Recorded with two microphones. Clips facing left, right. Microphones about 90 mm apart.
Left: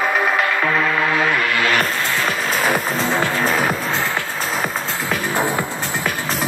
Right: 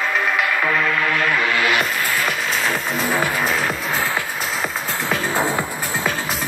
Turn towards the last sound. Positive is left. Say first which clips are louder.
# left 1 dB
turn(degrees=20)  # may be behind; listen again after turning